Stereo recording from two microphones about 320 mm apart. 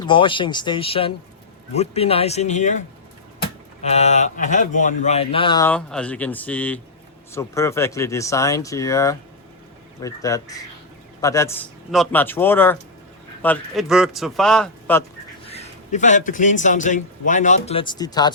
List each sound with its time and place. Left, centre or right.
0.0 s a man's voice: centre
15.4 s a man's voice: centre